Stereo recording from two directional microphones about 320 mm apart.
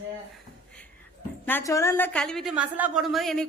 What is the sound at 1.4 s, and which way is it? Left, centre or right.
A woman's voice, centre.